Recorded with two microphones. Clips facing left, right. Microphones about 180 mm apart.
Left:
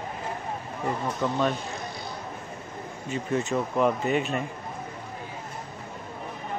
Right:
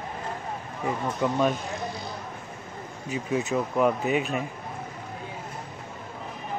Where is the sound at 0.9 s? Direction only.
5° right (ahead or behind).